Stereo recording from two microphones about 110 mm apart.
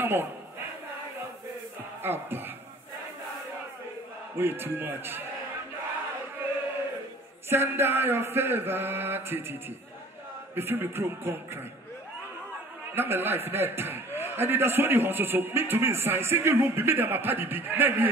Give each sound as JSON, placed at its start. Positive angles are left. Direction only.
{"t": 0.0, "sound": "a sound", "side_deg": -20}
{"t": 2.0, "sound": "speech", "side_deg": -20}
{"t": 4.4, "sound": "a man's voice", "side_deg": -20}
{"t": 7.4, "sound": "a man's voice", "side_deg": -20}
{"t": 12.9, "sound": "a man's voice", "side_deg": -20}